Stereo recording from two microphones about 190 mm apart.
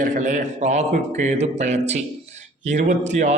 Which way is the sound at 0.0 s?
40° right (ahead or behind).